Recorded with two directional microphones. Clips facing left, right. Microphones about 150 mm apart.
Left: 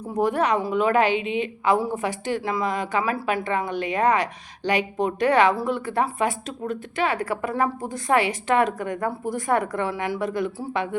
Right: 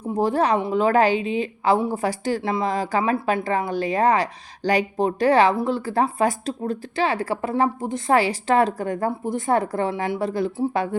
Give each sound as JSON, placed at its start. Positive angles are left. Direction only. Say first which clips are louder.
{"t": 0.1, "sound": "speech", "louder": "right 2 dB", "side_deg": -30}